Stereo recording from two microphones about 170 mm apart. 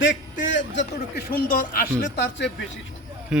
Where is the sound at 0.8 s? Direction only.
55° left (ahead or behind).